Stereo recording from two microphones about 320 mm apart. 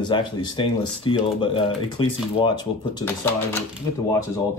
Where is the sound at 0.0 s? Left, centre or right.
Centre.